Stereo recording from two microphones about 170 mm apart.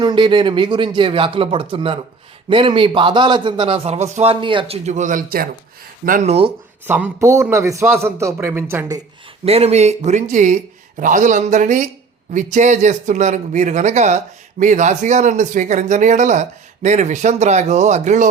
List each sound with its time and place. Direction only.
0.0 s speech: 25° right (ahead or behind)
4.9 s speech: 45° right (ahead or behind)
6.8 s speech: 10° right (ahead or behind)
9.4 s speech: 35° right (ahead or behind)